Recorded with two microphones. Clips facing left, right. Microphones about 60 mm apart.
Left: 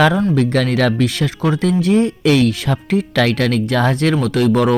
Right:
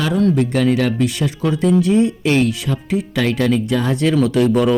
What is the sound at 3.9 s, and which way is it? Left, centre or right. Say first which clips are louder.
Speech: even; left.